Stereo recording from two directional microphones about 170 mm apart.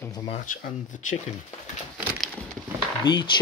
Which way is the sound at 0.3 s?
50° left (ahead or behind).